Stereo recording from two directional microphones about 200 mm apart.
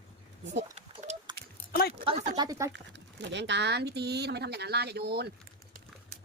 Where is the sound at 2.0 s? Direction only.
30° right (ahead or behind).